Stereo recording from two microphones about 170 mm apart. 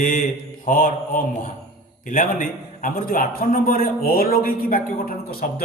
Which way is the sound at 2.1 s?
50° left (ahead or behind).